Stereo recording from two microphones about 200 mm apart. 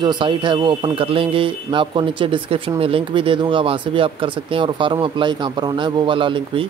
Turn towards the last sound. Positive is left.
turn(degrees=-25)  # may be behind; listen again after turning